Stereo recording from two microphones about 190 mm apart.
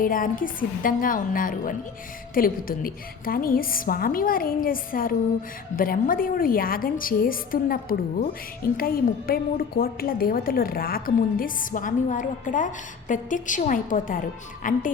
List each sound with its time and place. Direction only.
0.0 s a woman's voice: 45° left (ahead or behind)